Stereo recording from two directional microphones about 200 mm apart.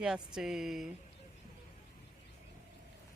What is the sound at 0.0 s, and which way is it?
Speech, 5° right (ahead or behind).